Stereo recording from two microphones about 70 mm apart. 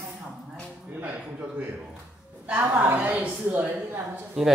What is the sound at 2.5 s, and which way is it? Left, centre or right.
A woman's voice, right.